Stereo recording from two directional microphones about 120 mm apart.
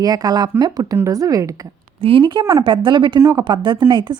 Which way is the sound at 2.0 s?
50° right (ahead or behind).